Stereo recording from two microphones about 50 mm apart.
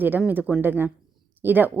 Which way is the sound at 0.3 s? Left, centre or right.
Right.